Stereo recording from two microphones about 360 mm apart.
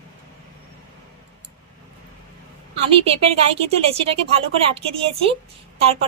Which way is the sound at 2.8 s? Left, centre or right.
Centre.